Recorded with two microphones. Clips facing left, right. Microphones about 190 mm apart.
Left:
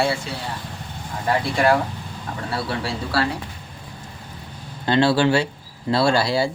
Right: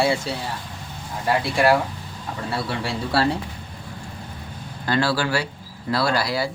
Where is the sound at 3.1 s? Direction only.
25° right (ahead or behind).